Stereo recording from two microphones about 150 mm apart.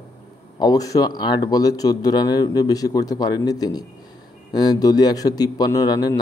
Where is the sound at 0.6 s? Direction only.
25° left (ahead or behind).